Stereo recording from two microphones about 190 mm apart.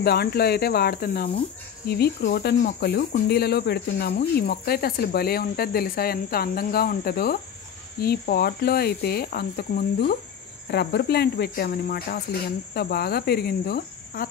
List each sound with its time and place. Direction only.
0.0 s speech: 55° left (ahead or behind)